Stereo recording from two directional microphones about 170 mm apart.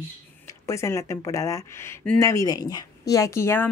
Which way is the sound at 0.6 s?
15° left (ahead or behind).